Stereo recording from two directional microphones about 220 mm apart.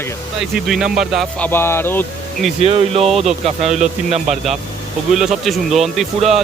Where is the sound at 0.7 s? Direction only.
Centre (ahead or behind).